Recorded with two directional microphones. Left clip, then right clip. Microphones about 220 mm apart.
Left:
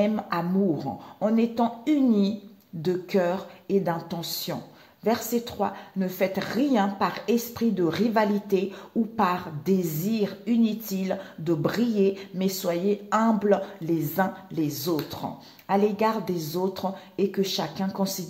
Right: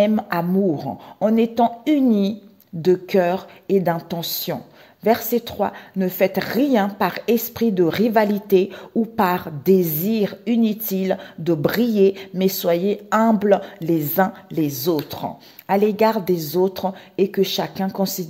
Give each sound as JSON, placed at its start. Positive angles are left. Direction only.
{"t": 0.0, "sound": "a woman's voice", "side_deg": -45}